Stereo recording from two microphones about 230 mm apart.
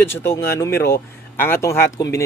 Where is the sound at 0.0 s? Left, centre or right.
Centre.